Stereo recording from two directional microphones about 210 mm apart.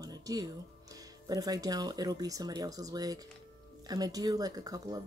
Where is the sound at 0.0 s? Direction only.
15° right (ahead or behind).